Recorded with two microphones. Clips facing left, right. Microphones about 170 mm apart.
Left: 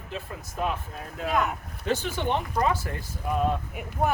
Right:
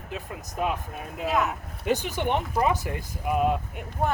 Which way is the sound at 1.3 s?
Centre (ahead or behind).